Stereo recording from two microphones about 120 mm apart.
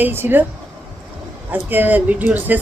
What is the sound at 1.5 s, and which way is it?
Speech, 15° right (ahead or behind).